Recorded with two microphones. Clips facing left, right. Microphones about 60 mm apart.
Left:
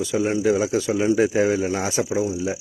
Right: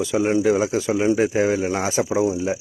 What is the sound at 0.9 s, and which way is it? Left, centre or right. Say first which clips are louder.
Speech: right 1 dB; right.